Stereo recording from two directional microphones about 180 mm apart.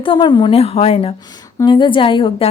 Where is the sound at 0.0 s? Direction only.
25° left (ahead or behind).